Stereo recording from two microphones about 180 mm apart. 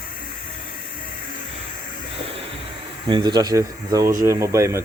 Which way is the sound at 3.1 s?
25° right (ahead or behind).